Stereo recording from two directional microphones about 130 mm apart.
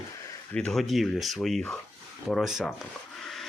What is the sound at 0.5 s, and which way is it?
Speech, 5° left (ahead or behind).